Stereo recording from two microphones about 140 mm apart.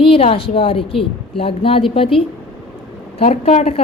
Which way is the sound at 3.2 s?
55° left (ahead or behind).